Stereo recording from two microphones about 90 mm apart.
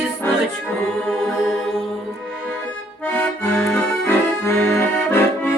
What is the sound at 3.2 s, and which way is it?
Accordion, 20° left (ahead or behind).